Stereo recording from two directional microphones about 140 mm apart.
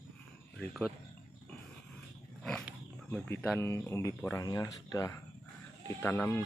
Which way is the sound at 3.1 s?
10° left (ahead or behind).